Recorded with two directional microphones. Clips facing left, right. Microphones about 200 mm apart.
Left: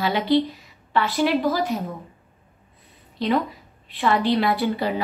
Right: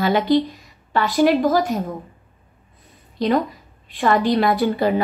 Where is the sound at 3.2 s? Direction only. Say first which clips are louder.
Right 3 dB; 40° right (ahead or behind).